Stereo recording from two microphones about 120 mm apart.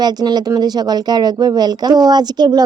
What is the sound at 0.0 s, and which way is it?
A woman's voice, 35° right (ahead or behind).